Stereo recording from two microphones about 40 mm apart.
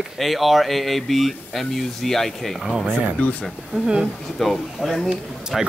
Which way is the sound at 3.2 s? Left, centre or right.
Left.